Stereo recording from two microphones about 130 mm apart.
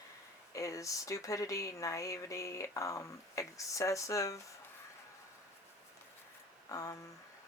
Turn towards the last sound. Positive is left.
turn(degrees=25)  # may be behind; listen again after turning